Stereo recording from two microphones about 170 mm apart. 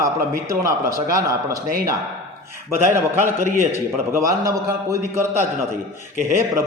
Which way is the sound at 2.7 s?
15° right (ahead or behind).